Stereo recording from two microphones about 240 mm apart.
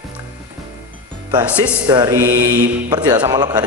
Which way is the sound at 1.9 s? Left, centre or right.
Centre.